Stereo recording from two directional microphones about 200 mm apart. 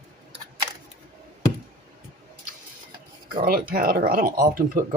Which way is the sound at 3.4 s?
45° right (ahead or behind).